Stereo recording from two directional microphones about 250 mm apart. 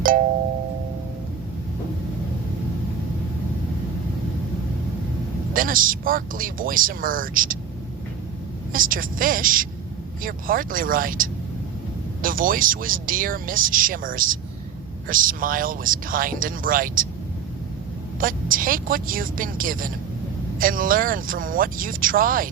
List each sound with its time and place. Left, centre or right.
5.5 s speech: right
8.7 s speech: right
18.2 s speech: right